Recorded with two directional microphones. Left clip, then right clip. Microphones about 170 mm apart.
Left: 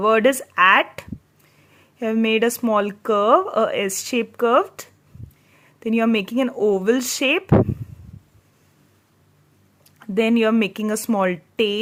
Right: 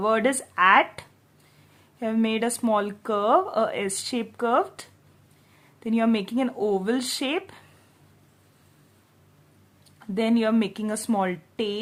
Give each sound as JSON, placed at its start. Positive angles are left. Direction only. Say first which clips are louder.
{"t": 0.0, "sound": "speech", "louder": "left 6 dB", "side_deg": 30}
{"t": 10.0, "sound": "speech", "louder": "left 6 dB", "side_deg": 30}